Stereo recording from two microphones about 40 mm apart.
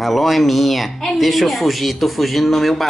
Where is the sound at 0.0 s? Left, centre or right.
Centre.